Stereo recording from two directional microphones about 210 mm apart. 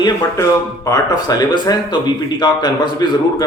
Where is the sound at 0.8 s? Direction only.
15° left (ahead or behind).